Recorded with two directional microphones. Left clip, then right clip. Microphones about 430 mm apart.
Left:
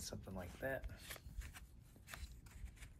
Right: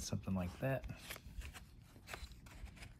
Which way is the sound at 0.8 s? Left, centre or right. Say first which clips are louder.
Right 3 dB; centre.